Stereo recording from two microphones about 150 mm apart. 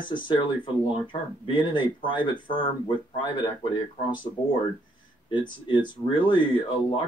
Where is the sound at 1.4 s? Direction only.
30° left (ahead or behind).